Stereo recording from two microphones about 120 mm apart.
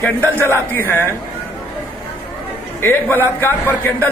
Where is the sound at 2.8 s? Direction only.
15° left (ahead or behind).